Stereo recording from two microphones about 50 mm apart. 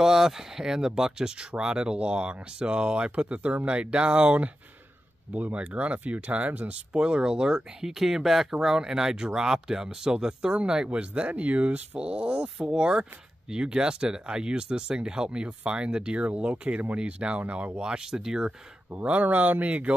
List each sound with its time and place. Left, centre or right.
0.0 s speech: centre
19.2 s speech: right